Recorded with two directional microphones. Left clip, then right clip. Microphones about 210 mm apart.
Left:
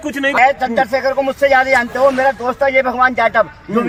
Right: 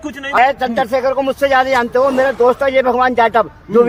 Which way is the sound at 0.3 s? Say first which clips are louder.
Right 1 dB; 15° right (ahead or behind).